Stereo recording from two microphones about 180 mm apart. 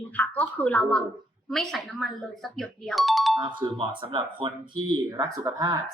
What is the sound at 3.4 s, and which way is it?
Speech, 25° right (ahead or behind).